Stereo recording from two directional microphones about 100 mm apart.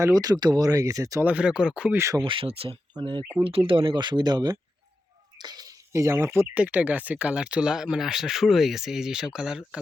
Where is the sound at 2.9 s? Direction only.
50° right (ahead or behind).